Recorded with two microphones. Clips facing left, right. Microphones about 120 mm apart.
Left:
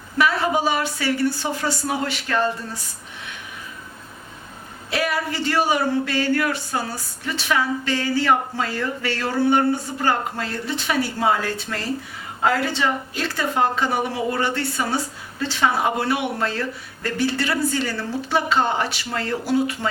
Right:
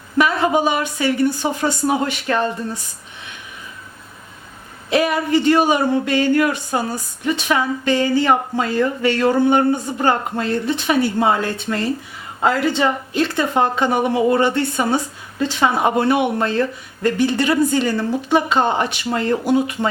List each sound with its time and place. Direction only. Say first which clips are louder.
0.2 s a woman's voice: right 4 dB; 20° right (ahead or behind)
4.9 s a woman's voice: right 7 dB; 20° right (ahead or behind)
12.8 s a woman's voice: right 5 dB; 20° right (ahead or behind)